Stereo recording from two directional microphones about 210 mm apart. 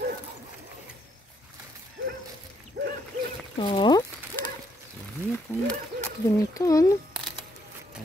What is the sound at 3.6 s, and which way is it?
Speech, 20° left (ahead or behind).